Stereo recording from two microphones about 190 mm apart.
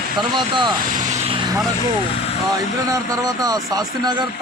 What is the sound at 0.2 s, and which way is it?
Speech, 25° right (ahead or behind).